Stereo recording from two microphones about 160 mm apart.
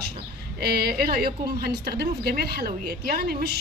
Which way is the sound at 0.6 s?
80° right.